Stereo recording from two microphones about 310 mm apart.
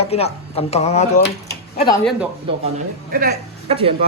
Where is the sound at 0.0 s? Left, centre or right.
Centre.